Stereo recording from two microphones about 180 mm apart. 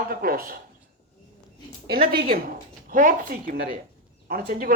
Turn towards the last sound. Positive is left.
turn(degrees=-55)  # may be behind; listen again after turning